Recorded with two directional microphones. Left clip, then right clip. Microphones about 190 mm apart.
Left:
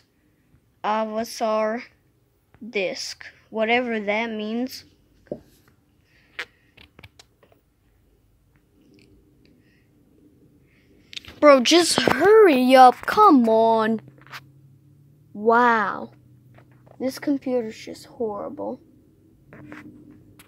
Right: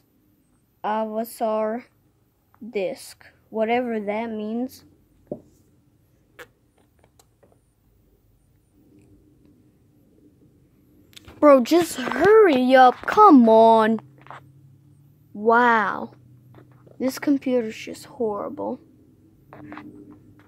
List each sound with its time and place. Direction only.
0.7 s a woman's voice: 5° right (ahead or behind)
6.4 s a sound: 5° left (ahead or behind)
11.1 s speech: 20° right (ahead or behind); by 12.4 s centre (ahead or behind)
12.4 s speech: 10° left (ahead or behind)
13.0 s speech: 5° right (ahead or behind)
15.3 s a woman's voice: centre (ahead or behind)
17.0 s speech: 15° right (ahead or behind)
19.5 s a sound: 15° left (ahead or behind)